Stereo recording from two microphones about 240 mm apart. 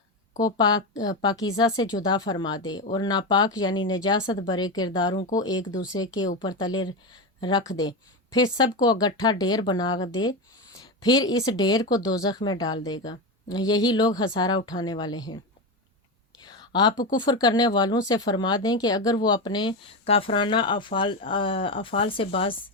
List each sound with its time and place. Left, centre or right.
1.2 s speech: centre
16.4 s speech: centre